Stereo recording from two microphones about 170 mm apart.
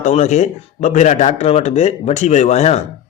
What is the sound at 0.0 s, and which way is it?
Speech, 45° left (ahead or behind).